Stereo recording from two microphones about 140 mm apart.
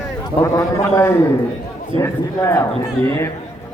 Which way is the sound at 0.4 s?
20° left (ahead or behind).